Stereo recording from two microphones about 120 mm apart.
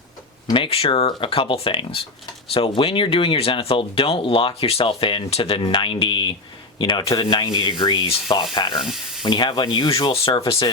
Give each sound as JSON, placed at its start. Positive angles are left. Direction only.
{"t": 0.5, "sound": "speech", "side_deg": 50}
{"t": 6.7, "sound": "sanding", "side_deg": 40}
{"t": 8.5, "sound": "speech", "side_deg": 40}
{"t": 8.8, "sound": "sizzle", "side_deg": 0}
{"t": 9.2, "sound": "speech", "side_deg": 40}